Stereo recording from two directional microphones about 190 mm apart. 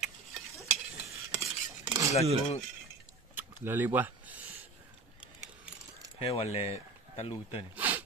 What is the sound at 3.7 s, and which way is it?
Speech, 10° right (ahead or behind).